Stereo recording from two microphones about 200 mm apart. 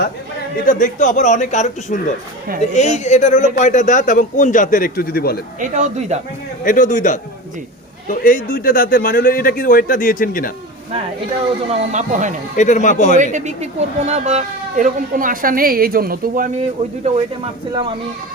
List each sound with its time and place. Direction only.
0.6 s a man's voice: 40° left (ahead or behind)
5.5 s speech: 40° right (ahead or behind)
6.7 s a man's voice: 40° left (ahead or behind)
11.7 s speech: 35° right (ahead or behind)
12.5 s a man's voice: 35° left (ahead or behind)
13.3 s speech: 35° right (ahead or behind)
17.7 s speech: 25° right (ahead or behind)